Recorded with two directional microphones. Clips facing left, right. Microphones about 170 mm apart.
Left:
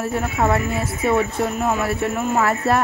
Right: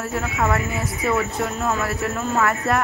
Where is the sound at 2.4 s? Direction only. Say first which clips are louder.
Left 2 dB; 30° left (ahead or behind).